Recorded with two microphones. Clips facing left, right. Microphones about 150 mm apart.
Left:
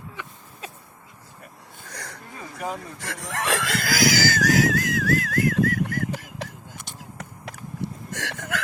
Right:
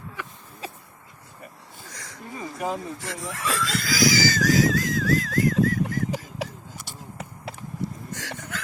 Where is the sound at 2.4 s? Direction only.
10° right (ahead or behind).